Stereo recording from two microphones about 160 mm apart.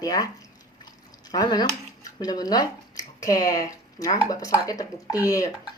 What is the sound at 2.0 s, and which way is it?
Speech, 25° left (ahead or behind).